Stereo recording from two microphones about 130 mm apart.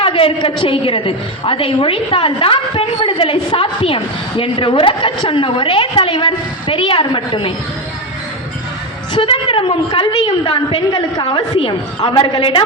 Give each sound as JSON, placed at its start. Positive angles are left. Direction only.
{"t": 0.0, "sound": "a woman's voice", "side_deg": 45}
{"t": 9.1, "sound": "a woman's voice", "side_deg": 40}
{"t": 10.8, "sound": "a woman's voice", "side_deg": 30}
{"t": 12.0, "sound": "a woman's voice", "side_deg": 45}